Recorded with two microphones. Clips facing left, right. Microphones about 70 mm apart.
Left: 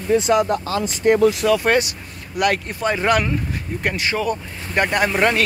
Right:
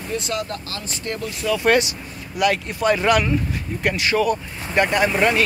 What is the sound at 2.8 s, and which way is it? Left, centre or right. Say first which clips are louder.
Speech: right 1 dB; left.